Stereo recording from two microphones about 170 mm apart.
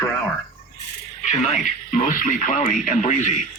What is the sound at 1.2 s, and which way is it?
Speech, 45° left (ahead or behind).